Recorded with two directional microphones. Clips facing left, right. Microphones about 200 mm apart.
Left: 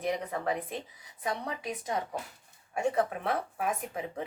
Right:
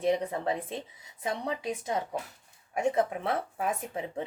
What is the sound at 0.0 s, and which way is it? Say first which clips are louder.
Speech: right 4 dB; 25° right (ahead or behind).